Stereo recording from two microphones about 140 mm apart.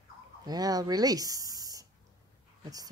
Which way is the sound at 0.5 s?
25° right (ahead or behind).